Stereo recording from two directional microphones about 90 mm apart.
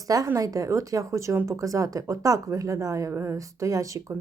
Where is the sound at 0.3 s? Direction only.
40° right (ahead or behind).